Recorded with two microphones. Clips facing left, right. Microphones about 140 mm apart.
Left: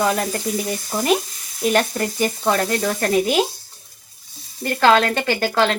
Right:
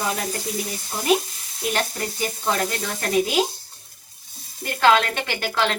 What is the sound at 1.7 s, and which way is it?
Speech, 50° left (ahead or behind).